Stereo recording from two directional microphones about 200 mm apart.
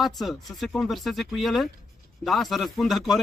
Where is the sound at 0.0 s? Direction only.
Centre (ahead or behind).